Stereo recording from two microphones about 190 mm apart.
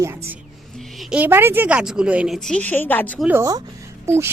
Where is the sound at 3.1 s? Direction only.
10° right (ahead or behind).